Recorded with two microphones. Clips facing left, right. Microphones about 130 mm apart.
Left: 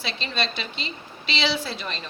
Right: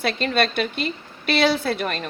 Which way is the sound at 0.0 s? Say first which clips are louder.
Right 8 dB; 55° right (ahead or behind).